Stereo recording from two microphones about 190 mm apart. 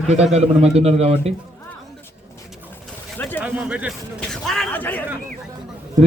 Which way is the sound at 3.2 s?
10° left (ahead or behind).